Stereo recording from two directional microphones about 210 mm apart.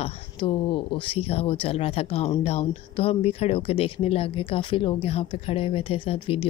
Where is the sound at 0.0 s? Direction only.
25° left (ahead or behind).